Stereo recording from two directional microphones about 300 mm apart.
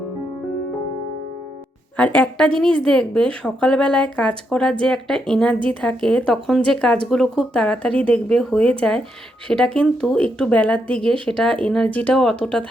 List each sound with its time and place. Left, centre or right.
2.0 s speech: centre